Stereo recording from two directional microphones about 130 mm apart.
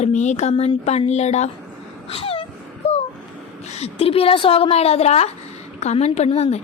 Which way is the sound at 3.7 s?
50° left (ahead or behind).